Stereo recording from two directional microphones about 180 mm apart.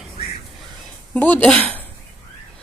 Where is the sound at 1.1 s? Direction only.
10° left (ahead or behind).